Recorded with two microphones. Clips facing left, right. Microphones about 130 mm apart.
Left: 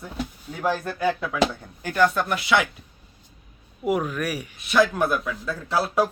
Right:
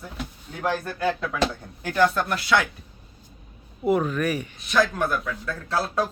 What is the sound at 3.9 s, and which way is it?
Speech, 10° left (ahead or behind).